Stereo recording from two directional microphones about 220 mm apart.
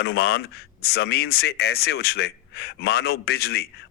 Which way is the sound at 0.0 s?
45° left (ahead or behind).